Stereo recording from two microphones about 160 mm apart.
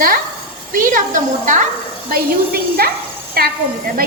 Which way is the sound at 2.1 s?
70° right (ahead or behind).